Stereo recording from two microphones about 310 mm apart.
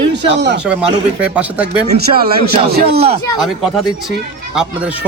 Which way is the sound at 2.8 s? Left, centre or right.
Centre.